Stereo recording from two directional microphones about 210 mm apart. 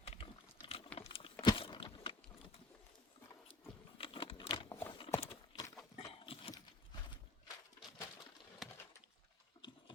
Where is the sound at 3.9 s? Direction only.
25° left (ahead or behind).